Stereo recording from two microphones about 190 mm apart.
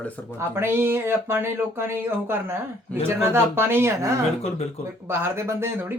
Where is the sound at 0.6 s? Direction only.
10° right (ahead or behind).